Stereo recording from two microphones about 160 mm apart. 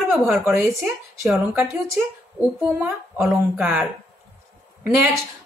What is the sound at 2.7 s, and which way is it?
Speech, 15° right (ahead or behind).